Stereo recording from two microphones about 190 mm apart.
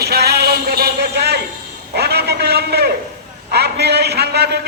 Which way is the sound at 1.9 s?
60° right (ahead or behind).